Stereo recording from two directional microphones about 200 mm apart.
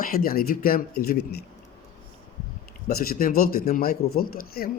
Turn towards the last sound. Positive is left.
turn(degrees=50)  # may be behind; listen again after turning